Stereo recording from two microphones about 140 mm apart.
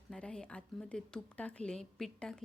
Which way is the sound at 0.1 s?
5° left (ahead or behind).